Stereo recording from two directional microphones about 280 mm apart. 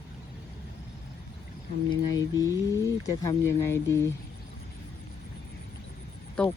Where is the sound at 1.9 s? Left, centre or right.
Centre.